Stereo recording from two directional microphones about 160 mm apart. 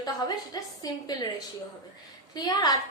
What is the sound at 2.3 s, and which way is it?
Speech, 25° left (ahead or behind).